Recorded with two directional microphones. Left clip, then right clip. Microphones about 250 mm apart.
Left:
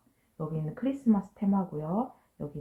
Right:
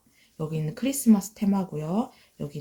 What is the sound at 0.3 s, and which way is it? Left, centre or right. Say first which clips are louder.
Speech: right 4 dB; right.